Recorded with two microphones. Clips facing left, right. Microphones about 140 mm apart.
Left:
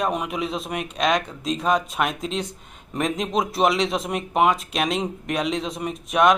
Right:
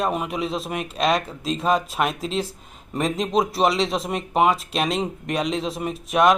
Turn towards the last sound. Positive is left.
turn(degrees=0)  # may be behind; listen again after turning